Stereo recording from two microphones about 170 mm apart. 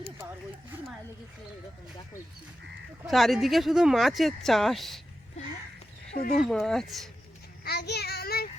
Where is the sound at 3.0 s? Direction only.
Centre (ahead or behind).